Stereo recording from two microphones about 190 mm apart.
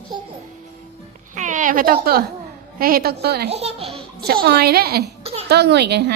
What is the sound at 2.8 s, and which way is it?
Speech, 50° right (ahead or behind).